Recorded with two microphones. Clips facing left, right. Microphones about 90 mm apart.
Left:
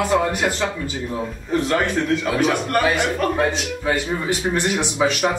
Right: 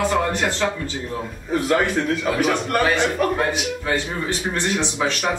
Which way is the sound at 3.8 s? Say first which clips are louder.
Left 4 dB; 15° left (ahead or behind).